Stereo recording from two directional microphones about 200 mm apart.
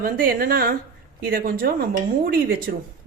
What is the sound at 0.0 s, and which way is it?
Speech, 45° right (ahead or behind).